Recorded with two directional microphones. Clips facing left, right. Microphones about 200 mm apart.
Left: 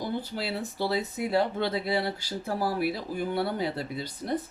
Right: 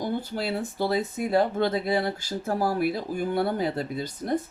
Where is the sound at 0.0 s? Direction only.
50° right (ahead or behind).